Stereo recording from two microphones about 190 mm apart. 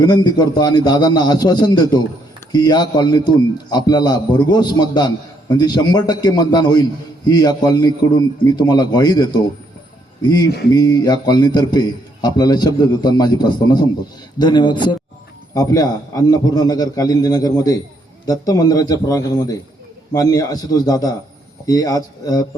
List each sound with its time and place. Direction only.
0.0 s a man's voice: 20° left (ahead or behind)